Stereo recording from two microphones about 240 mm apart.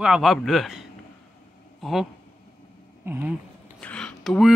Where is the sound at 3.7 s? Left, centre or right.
Centre.